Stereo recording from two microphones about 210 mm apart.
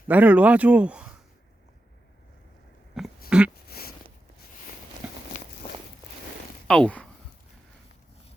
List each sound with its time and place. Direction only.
0.1 s speech: 5° right (ahead or behind)
3.2 s dog: 5° right (ahead or behind)
3.7 s a sound: 45° left (ahead or behind)
5.0 s walk: 5° right (ahead or behind)
6.7 s speech: 5° left (ahead or behind)